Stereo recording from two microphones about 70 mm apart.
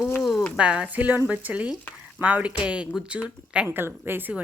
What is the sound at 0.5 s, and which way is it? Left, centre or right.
A woman's voice, centre.